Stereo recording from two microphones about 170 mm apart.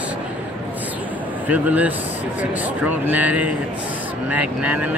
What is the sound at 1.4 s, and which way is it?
Speech, 10° right (ahead or behind).